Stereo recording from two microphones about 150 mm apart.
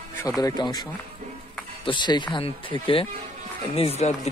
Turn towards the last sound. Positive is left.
turn(degrees=45)  # may be behind; listen again after turning